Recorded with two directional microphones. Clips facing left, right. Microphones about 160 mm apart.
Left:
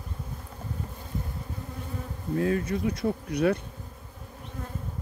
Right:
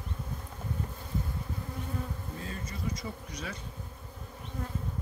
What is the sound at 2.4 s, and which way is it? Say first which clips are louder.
Speech: left 14 dB; 65° left (ahead or behind).